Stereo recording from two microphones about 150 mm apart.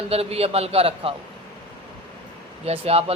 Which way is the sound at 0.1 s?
40° right (ahead or behind).